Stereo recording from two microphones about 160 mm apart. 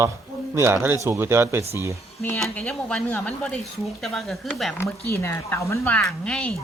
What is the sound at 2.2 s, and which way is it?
Speech, 15° left (ahead or behind).